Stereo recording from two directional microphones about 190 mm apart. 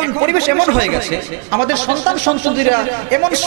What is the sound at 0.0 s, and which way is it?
Speech, 15° right (ahead or behind).